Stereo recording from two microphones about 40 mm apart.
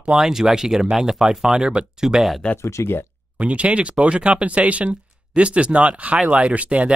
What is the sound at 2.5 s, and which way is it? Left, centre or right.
Speech, left.